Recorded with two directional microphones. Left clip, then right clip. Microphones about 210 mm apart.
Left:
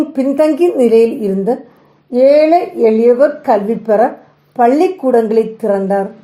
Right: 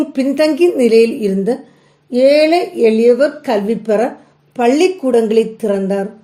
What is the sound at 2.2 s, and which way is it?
Speech, 5° right (ahead or behind).